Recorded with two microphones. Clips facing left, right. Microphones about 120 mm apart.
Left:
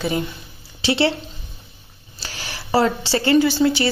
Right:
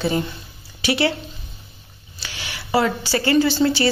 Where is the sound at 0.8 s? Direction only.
30° left (ahead or behind).